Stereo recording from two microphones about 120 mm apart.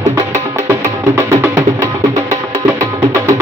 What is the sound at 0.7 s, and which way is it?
Music, 25° right (ahead or behind).